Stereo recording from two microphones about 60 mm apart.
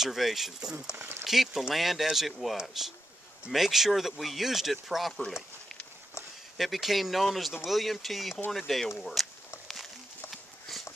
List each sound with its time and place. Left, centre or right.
0.0 s speech: centre
0.9 s speech: right
1.2 s speech: centre
6.5 s speech: centre